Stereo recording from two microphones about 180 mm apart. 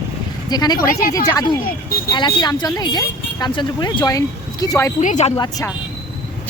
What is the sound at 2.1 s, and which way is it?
Speech, 25° left (ahead or behind).